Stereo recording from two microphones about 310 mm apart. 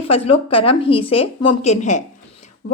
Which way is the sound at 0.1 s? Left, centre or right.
Centre.